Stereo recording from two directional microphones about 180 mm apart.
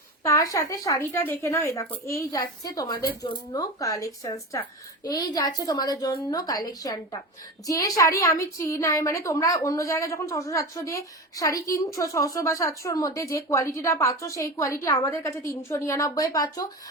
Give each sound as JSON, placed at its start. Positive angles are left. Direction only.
{"t": 0.2, "sound": "a woman's voice", "side_deg": 15}